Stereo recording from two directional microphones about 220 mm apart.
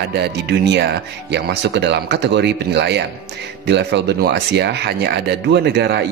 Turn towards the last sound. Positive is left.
turn(degrees=-50)  # may be behind; listen again after turning